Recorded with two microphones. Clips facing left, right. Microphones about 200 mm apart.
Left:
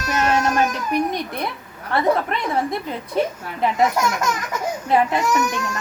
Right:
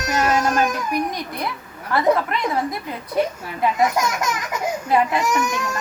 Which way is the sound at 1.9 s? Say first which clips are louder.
Right 1 dB; 25° left (ahead or behind).